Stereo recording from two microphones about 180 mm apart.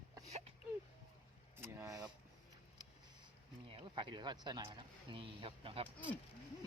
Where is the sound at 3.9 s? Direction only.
25° right (ahead or behind).